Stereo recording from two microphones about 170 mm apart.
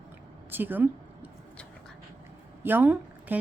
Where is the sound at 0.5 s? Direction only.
10° right (ahead or behind).